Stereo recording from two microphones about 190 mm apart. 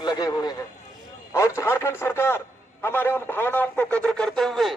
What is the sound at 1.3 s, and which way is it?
Radio, 15° left (ahead or behind).